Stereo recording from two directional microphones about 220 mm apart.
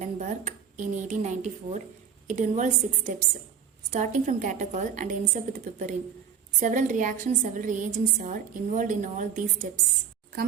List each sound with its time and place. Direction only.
0.0 s a woman's voice: 30° right (ahead or behind)